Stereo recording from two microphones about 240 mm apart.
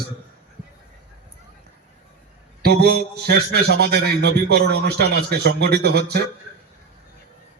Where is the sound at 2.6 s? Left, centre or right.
Right.